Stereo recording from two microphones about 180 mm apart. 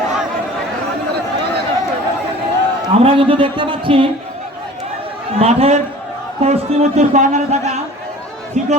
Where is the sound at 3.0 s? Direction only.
30° right (ahead or behind).